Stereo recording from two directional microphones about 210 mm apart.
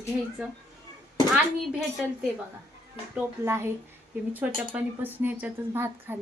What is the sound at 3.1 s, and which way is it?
Speech, 10° right (ahead or behind).